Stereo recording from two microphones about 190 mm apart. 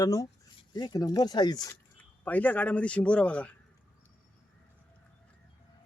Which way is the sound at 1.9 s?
10° left (ahead or behind).